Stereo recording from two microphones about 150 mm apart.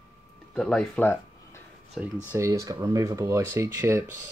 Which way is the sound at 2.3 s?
20° right (ahead or behind).